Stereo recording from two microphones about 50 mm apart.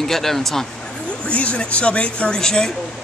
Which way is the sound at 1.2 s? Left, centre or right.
Left.